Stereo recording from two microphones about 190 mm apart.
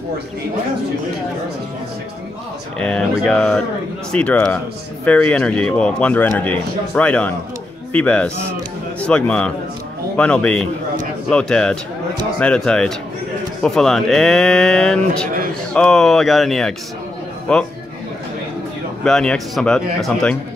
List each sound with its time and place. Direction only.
2.8 s a man's voice: 5° left (ahead or behind)
19.0 s speech: centre (ahead or behind)